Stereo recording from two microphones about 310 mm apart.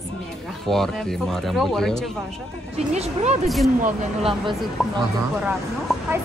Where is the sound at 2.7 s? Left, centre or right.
Right.